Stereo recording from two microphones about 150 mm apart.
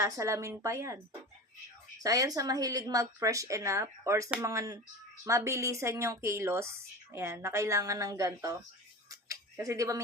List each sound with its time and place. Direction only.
0.0 s speech: 20° right (ahead or behind)
2.0 s speech: 25° right (ahead or behind)
9.0 s a sound: 20° right (ahead or behind)